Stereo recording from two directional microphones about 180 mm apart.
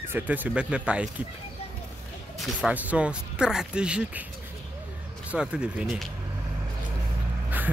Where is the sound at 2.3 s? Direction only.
5° right (ahead or behind).